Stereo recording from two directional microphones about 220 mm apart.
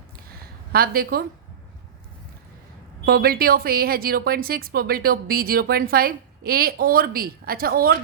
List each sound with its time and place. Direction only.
0.7 s speech: 45° right (ahead or behind)
3.1 s speech: 45° right (ahead or behind)